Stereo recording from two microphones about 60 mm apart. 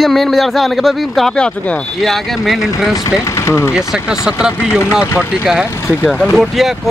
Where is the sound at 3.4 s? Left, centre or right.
Left.